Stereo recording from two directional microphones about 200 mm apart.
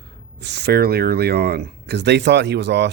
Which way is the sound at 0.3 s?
60° right (ahead or behind).